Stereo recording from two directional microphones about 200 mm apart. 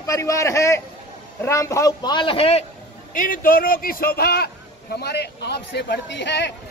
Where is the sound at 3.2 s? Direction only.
45° left (ahead or behind).